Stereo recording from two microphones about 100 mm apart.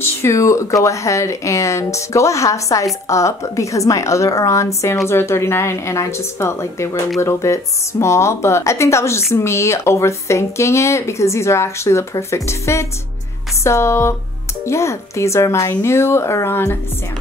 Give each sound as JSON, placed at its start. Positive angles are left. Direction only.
{"t": 0.0, "sound": "speech", "side_deg": 30}